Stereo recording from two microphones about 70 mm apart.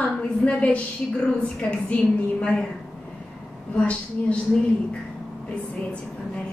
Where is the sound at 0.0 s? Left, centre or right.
Centre.